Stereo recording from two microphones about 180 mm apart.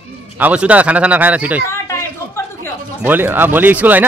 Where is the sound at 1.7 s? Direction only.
15° left (ahead or behind).